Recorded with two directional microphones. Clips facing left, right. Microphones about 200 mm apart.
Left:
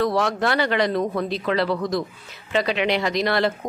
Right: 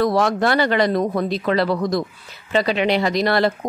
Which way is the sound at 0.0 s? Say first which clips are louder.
Right 3 dB; 40° right (ahead or behind).